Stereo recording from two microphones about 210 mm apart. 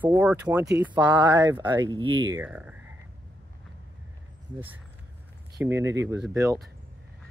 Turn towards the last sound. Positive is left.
turn(degrees=-15)  # may be behind; listen again after turning